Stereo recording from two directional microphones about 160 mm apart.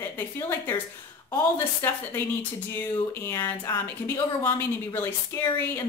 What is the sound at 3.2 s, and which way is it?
Speech, 15° left (ahead or behind).